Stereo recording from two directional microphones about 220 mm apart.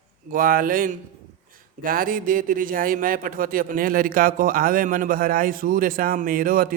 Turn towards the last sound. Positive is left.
turn(degrees=-40)  # may be behind; listen again after turning